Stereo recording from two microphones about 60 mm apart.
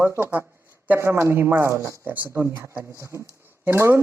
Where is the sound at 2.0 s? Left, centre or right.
Right.